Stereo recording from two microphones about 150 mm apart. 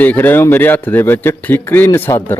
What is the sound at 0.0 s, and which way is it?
A man's voice, 10° left (ahead or behind).